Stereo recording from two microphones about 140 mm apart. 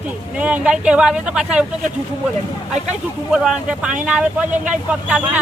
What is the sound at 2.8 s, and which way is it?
Speech, 5° right (ahead or behind).